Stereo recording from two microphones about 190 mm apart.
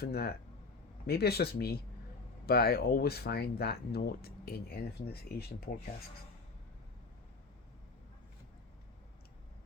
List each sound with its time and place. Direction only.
0.0 s speech: 55° left (ahead or behind)